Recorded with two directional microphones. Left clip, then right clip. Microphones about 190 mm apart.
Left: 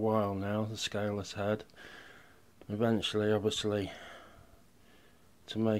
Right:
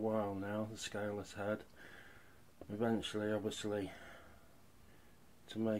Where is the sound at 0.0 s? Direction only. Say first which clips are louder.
Left 7 dB; 40° left (ahead or behind).